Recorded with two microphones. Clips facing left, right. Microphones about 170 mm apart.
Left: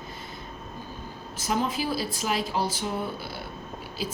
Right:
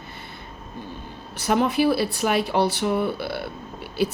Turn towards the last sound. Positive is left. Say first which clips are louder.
# right 8 dB
turn(degrees=-65)  # may be behind; listen again after turning